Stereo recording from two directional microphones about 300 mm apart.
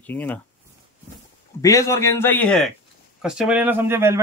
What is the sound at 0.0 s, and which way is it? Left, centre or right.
Speech, centre.